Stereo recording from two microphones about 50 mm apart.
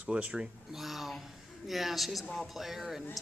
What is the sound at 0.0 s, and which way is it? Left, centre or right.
Speech, right.